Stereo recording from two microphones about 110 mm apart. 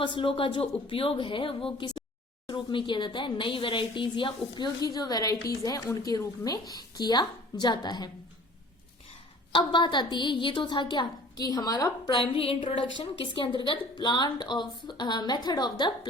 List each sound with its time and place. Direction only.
0.0 s speech: 50° left (ahead or behind)
9.5 s speech: 50° left (ahead or behind)
12.2 s speech: 55° left (ahead or behind); by 15.9 s 40° left (ahead or behind)